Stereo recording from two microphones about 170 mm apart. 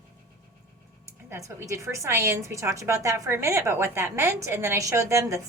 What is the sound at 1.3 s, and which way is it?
A woman's voice, 15° right (ahead or behind).